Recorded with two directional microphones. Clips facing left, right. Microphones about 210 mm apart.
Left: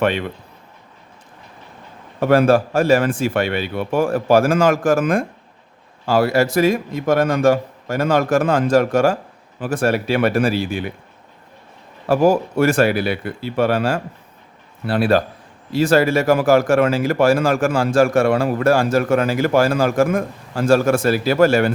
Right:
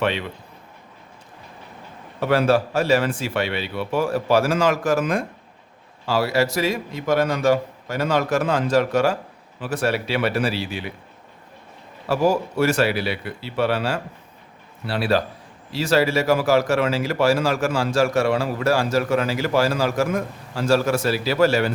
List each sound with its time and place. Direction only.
0.0 s speech: 50° left (ahead or behind)
2.2 s speech: 50° left (ahead or behind)
12.0 s speech: 50° left (ahead or behind)